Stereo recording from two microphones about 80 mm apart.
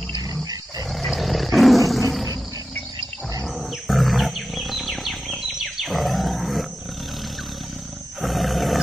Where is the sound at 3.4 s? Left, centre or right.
Centre.